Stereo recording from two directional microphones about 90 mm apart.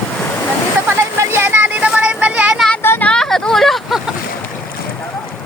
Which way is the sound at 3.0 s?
5° left (ahead or behind).